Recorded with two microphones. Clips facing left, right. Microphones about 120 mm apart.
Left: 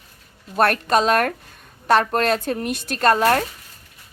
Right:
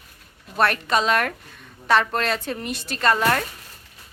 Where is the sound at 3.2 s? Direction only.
35° left (ahead or behind).